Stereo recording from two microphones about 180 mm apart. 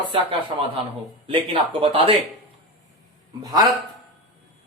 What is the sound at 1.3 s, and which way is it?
Speech, 30° right (ahead or behind).